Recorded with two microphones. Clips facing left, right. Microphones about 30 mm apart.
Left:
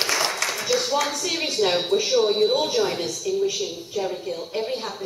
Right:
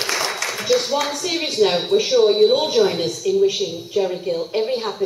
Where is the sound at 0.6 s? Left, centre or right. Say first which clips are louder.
Right 5 dB; centre.